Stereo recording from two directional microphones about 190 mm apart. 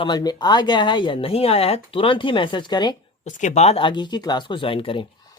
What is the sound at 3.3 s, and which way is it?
Speech, 40° left (ahead or behind).